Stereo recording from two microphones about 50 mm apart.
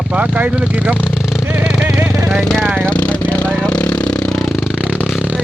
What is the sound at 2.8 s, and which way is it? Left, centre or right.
Vehicle, left.